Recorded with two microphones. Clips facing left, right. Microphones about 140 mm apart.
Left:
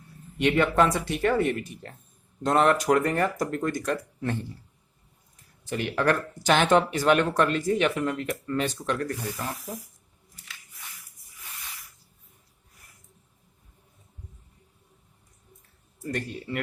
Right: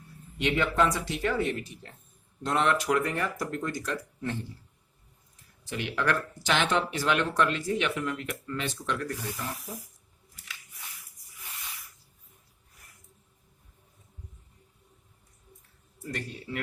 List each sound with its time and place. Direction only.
0.3 s speech: 55° left (ahead or behind)
5.6 s speech: 45° left (ahead or behind)